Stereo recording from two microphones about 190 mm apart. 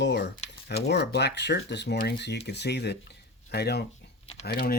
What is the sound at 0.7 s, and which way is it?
Speech, 60° left (ahead or behind).